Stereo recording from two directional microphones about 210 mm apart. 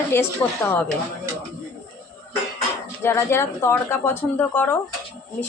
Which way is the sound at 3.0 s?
10° left (ahead or behind).